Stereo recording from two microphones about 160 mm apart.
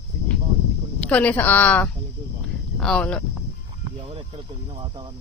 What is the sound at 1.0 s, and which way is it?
A woman's voice, 10° left (ahead or behind).